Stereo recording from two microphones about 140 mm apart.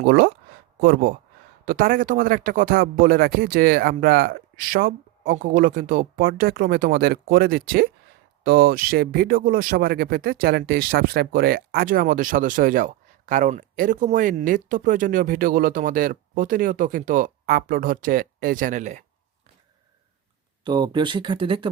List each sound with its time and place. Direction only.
0.8 s speech: 90° right; by 19.0 s 60° right (ahead or behind)
20.7 s speech: 30° right (ahead or behind)